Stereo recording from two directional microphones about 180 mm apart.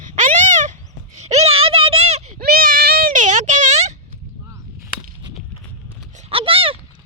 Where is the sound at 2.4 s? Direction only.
55° right (ahead or behind).